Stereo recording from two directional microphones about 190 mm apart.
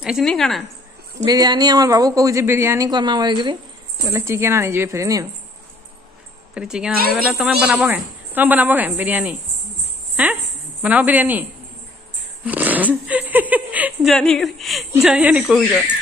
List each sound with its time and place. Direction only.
0.0 s speech: centre (ahead or behind)
1.2 s a woman's voice: 20° right (ahead or behind)
6.5 s a woman's voice: 5° right (ahead or behind)
12.4 s a sound: 10° right (ahead or behind)
14.1 s speech: 5° left (ahead or behind)